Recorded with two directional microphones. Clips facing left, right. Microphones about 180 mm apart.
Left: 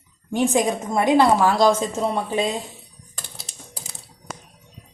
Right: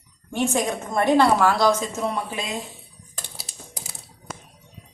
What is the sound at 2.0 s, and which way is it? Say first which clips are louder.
Speech: left 5 dB; 30° left (ahead or behind).